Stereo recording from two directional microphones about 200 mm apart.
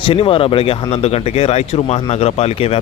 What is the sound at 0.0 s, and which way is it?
Speech, 25° left (ahead or behind).